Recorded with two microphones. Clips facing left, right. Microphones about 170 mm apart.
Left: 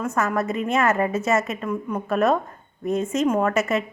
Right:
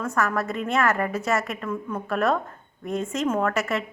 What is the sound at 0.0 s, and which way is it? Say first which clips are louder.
A woman's voice: left 2 dB; 20° left (ahead or behind).